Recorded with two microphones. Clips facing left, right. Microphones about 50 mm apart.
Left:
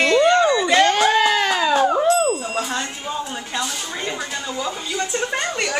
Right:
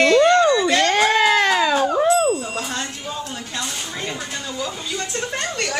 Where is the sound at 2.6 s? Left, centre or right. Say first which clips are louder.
Left 2 dB; centre.